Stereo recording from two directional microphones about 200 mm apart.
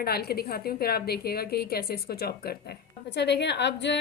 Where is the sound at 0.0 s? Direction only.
50° left (ahead or behind).